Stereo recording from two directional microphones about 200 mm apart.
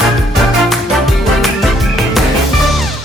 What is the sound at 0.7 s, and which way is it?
Music, centre (ahead or behind).